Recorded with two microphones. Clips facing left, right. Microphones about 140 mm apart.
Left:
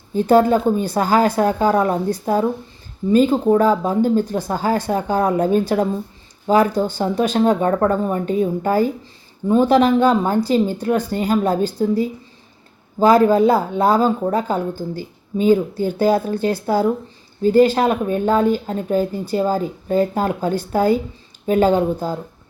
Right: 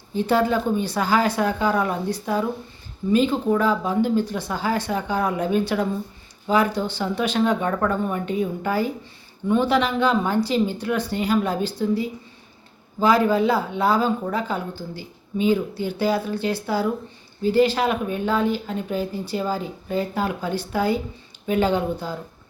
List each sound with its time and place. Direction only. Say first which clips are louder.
0.1 s speech: left 6 dB; 45° left (ahead or behind)